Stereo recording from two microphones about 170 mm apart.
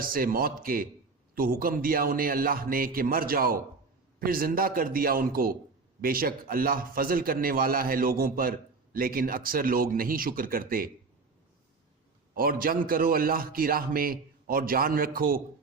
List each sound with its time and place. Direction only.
0.0 s a man's voice: 55° right (ahead or behind)
12.3 s a man's voice: 55° right (ahead or behind)